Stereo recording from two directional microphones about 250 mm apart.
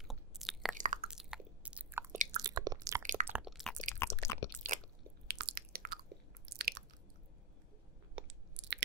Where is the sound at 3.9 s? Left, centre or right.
Centre.